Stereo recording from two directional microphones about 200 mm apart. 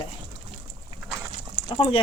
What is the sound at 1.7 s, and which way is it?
Speech, 25° left (ahead or behind).